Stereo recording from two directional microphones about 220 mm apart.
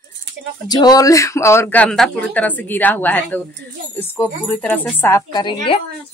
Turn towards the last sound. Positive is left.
turn(degrees=20)  # may be behind; listen again after turning